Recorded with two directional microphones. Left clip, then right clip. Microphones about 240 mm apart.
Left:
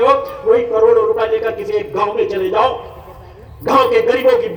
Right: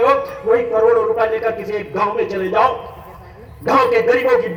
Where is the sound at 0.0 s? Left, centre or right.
Left.